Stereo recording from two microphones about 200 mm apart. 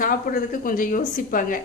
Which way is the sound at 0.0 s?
45° left (ahead or behind).